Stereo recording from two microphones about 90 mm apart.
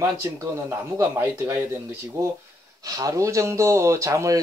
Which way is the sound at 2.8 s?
40° right (ahead or behind).